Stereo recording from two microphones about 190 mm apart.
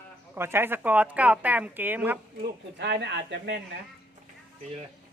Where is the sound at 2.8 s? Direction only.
65° right (ahead or behind).